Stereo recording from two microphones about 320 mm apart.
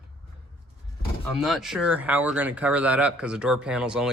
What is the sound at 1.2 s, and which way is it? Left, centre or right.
Speech, centre.